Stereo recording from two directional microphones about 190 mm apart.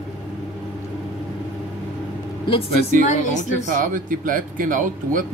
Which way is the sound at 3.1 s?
40° left (ahead or behind).